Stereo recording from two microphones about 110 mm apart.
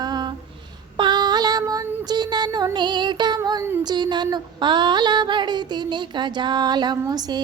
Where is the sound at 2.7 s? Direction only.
45° right (ahead or behind).